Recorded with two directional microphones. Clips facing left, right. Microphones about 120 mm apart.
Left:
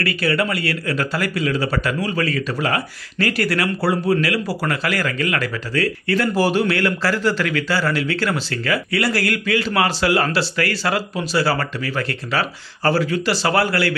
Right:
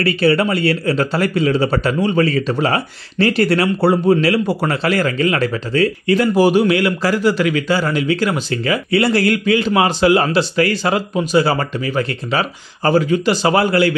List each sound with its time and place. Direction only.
0.0 s a man's voice: 25° right (ahead or behind)